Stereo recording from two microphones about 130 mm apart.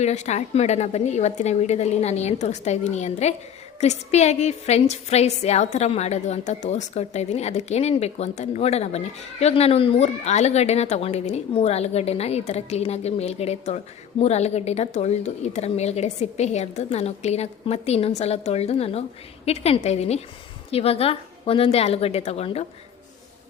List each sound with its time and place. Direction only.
0.0 s a woman's voice: 60° left (ahead or behind)